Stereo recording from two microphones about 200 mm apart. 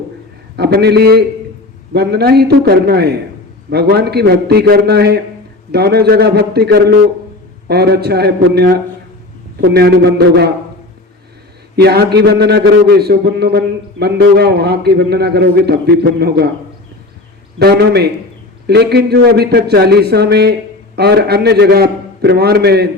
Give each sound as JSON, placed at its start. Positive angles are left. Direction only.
{"t": 0.5, "sound": "speech", "side_deg": -55}
{"t": 11.8, "sound": "speech", "side_deg": -55}
{"t": 17.6, "sound": "speech", "side_deg": -55}